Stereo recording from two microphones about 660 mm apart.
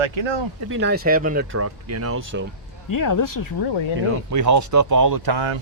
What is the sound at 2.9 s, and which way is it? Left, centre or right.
Speech, left.